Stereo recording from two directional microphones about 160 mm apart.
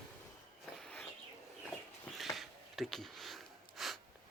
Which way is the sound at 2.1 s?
Centre (ahead or behind).